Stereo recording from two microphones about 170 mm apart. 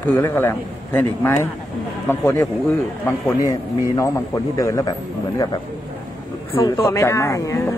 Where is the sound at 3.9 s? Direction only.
20° left (ahead or behind).